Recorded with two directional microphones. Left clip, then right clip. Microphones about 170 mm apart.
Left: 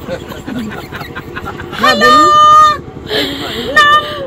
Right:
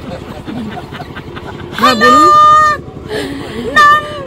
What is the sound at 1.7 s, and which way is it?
Speech, 15° right (ahead or behind).